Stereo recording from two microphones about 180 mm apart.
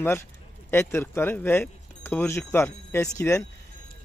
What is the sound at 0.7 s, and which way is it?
Speech, 10° left (ahead or behind).